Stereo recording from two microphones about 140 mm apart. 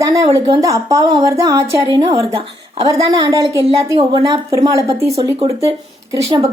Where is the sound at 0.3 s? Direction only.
25° right (ahead or behind).